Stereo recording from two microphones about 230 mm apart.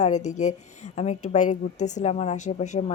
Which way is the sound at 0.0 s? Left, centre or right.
Left.